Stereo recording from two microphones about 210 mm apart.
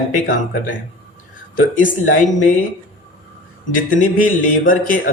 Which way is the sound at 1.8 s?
40° left (ahead or behind).